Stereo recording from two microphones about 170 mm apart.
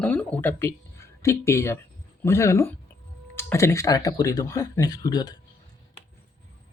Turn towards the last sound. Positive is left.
turn(degrees=25)  # may be behind; listen again after turning